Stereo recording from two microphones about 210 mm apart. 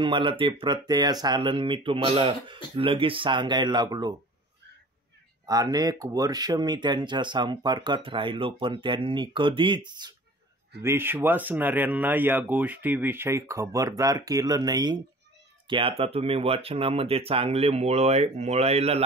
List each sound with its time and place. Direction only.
0.0 s speech: 25° right (ahead or behind)
5.5 s speech: 20° right (ahead or behind)
15.6 s cat: 25° right (ahead or behind)
16.0 s speech: 30° right (ahead or behind)